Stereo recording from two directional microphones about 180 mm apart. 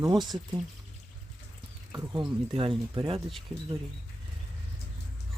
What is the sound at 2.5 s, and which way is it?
Speech, 30° right (ahead or behind).